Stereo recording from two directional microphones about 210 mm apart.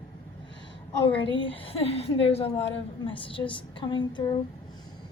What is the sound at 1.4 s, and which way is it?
A woman's voice, 25° left (ahead or behind).